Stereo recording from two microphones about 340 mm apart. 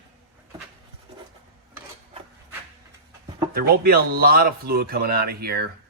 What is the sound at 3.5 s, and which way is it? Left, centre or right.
Speech, right.